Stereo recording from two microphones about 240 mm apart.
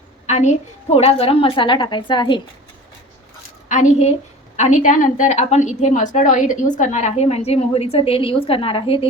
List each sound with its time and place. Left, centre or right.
0.3 s a woman's voice: left
3.7 s a woman's voice: left